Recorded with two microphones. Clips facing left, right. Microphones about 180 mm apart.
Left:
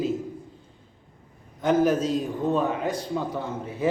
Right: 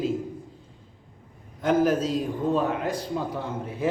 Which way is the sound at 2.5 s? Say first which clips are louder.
Left 1 dB; 5° left (ahead or behind).